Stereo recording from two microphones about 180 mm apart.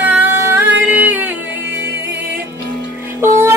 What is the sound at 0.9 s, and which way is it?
Music, 10° right (ahead or behind).